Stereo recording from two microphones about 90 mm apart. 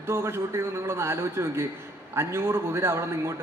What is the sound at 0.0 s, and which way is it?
A man's voice, 30° right (ahead or behind).